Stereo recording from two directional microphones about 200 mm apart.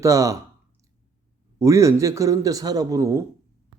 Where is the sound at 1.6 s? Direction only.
15° right (ahead or behind).